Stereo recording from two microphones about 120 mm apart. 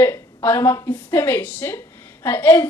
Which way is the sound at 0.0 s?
20° left (ahead or behind).